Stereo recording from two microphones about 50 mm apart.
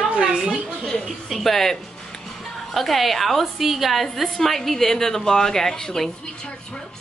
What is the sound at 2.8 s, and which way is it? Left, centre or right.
A woman's voice, centre.